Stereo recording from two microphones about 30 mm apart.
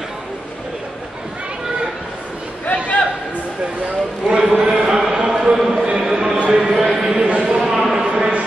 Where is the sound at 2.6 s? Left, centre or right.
Left.